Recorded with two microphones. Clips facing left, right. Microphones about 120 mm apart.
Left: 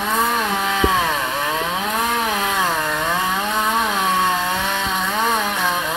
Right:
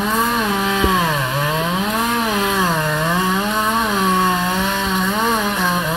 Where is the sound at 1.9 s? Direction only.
25° right (ahead or behind).